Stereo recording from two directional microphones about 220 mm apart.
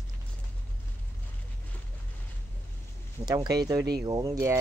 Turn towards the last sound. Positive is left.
turn(degrees=-15)  # may be behind; listen again after turning